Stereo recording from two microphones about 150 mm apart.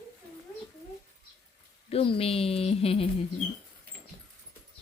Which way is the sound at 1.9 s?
40° left (ahead or behind).